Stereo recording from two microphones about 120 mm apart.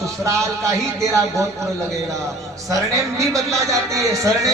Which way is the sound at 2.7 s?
25° right (ahead or behind).